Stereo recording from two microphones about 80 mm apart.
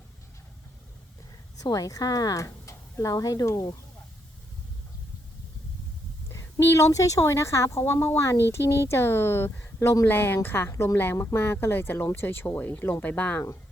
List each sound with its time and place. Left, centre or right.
1.7 s speech: left
6.2 s speech: left